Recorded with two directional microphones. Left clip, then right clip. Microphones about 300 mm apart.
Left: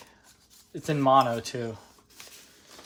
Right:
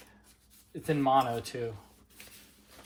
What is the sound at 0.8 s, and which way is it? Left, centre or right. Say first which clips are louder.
Speech: left 5 dB; left.